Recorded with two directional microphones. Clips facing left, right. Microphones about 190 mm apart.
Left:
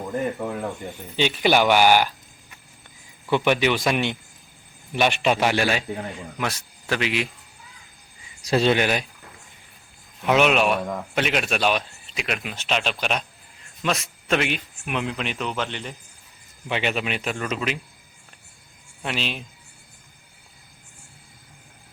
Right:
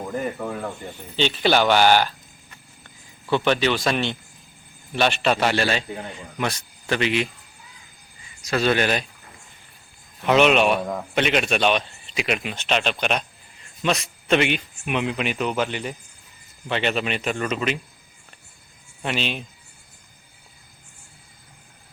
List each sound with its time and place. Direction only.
0.3 s a man's voice: 5° left (ahead or behind)
8.4 s speech: 30° left (ahead or behind)
8.7 s a man's voice: 10° left (ahead or behind)
10.2 s a man's voice: 5° left (ahead or behind)
16.6 s a man's voice: 10° left (ahead or behind)
19.0 s a man's voice: centre (ahead or behind)